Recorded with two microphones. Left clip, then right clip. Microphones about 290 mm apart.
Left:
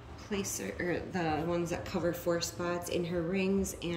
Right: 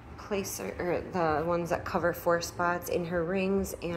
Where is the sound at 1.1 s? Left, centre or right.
Centre.